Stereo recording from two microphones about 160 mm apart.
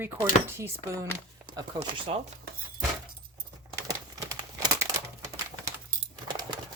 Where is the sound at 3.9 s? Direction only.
20° right (ahead or behind).